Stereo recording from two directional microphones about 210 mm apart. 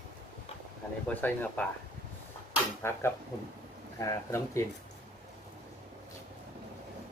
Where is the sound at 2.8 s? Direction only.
10° left (ahead or behind).